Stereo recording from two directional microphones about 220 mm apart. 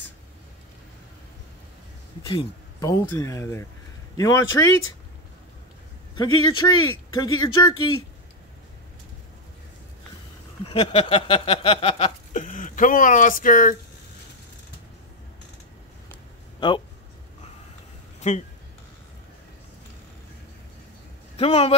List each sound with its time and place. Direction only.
2.2 s speech: 25° left (ahead or behind)
2.9 s speech: 15° left (ahead or behind)
6.1 s speech: 20° left (ahead or behind)
10.7 s a sound: 25° left (ahead or behind)
16.5 s speech: 20° left (ahead or behind)
21.4 s speech: 25° left (ahead or behind)